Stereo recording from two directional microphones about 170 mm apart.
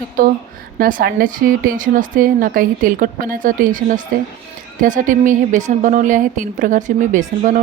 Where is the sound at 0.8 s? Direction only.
55° right (ahead or behind).